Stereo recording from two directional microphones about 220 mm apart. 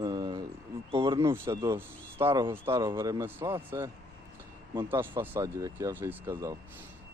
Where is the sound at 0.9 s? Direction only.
15° right (ahead or behind).